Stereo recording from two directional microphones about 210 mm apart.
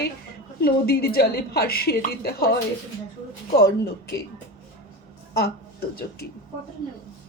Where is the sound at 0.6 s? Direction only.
50° left (ahead or behind).